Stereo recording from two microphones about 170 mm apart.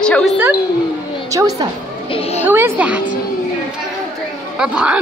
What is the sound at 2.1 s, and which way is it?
Speech, 35° left (ahead or behind).